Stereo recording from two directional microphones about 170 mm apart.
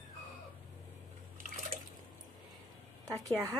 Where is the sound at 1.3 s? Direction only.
55° right (ahead or behind).